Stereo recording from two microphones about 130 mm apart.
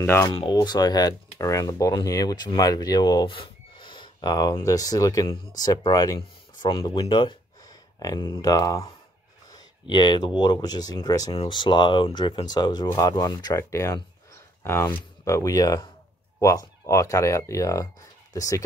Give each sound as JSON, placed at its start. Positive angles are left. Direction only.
{"t": 0.0, "sound": "speech", "side_deg": 20}
{"t": 0.3, "sound": "speech", "side_deg": 35}